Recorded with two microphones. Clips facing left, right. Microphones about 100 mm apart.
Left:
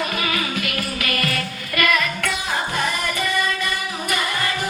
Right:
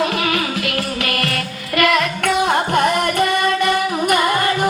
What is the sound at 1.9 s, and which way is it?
Music, 70° right (ahead or behind).